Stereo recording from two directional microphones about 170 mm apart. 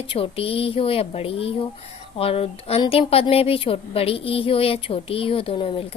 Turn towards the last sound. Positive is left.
turn(degrees=35)  # may be behind; listen again after turning